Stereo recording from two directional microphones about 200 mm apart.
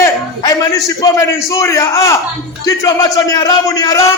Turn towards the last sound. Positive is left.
turn(degrees=15)  # may be behind; listen again after turning